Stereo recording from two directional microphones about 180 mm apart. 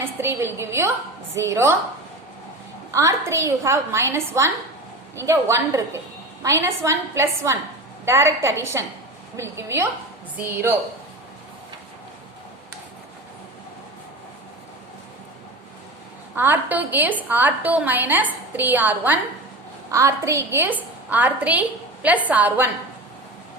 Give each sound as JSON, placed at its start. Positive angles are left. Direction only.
{"t": 0.0, "sound": "a woman's voice", "side_deg": -15}
{"t": 2.9, "sound": "a woman's voice", "side_deg": -15}
{"t": 16.3, "sound": "a woman's voice", "side_deg": -10}